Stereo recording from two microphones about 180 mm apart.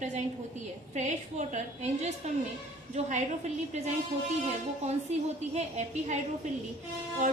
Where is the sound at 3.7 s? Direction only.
40° right (ahead or behind).